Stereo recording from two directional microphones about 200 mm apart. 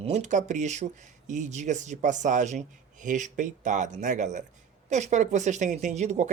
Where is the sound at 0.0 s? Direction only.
35° right (ahead or behind).